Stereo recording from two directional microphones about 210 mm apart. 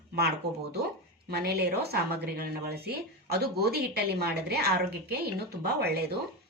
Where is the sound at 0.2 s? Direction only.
50° right (ahead or behind).